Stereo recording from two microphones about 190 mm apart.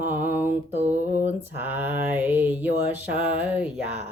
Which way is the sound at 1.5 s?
10° right (ahead or behind).